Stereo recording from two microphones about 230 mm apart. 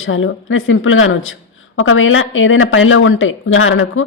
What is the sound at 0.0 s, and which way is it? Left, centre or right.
A woman's voice, left.